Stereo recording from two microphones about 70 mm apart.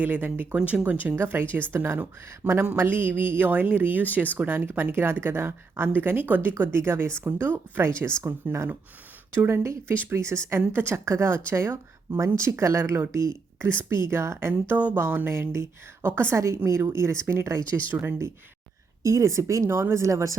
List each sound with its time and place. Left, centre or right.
0.0 s speech: right
14.8 s a woman's voice: right
17.9 s speech: right
19.0 s speech: right